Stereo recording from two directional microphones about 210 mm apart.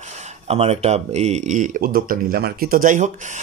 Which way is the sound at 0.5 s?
30° right (ahead or behind).